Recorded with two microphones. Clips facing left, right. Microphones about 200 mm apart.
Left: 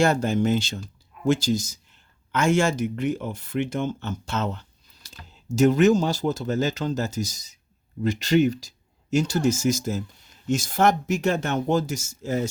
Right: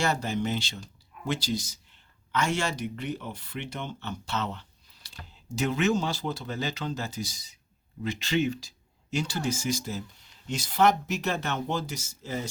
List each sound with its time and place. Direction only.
0.0 s speech: 50° left (ahead or behind)